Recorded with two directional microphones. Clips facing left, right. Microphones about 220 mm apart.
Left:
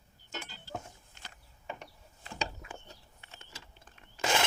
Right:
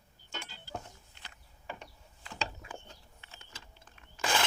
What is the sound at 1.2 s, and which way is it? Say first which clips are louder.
Mechanisms: left 5 dB; 45° left (ahead or behind).